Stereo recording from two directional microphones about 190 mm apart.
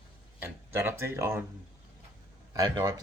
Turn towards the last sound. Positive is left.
turn(degrees=-20)  # may be behind; listen again after turning